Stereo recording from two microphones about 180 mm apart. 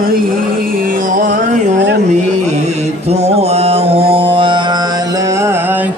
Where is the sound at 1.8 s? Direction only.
75° right (ahead or behind).